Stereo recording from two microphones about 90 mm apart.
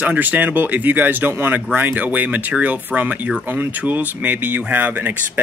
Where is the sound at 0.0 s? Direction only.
20° right (ahead or behind).